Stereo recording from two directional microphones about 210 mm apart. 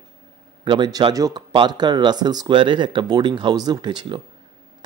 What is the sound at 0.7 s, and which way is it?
Speech, 20° right (ahead or behind).